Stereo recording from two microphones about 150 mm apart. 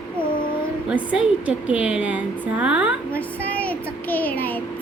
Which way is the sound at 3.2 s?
10° left (ahead or behind).